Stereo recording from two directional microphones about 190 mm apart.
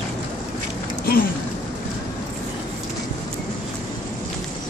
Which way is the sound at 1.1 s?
55° left (ahead or behind).